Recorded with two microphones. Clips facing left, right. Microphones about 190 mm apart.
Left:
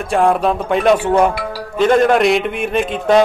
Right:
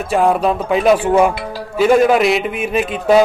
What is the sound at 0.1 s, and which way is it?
A man's voice, centre (ahead or behind).